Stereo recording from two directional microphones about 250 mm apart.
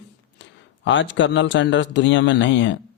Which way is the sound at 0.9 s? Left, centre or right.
Left.